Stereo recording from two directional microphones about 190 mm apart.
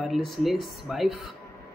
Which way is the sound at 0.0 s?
Centre (ahead or behind).